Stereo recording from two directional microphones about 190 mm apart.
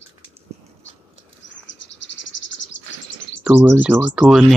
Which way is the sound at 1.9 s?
70° left (ahead or behind).